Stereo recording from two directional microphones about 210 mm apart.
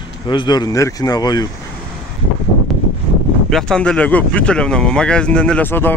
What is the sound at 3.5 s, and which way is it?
Speech, 5° left (ahead or behind).